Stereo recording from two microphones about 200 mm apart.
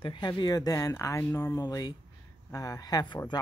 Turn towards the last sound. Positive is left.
turn(degrees=20)  # may be behind; listen again after turning